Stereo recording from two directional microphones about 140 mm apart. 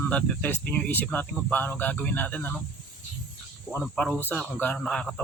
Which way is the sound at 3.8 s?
5° left (ahead or behind).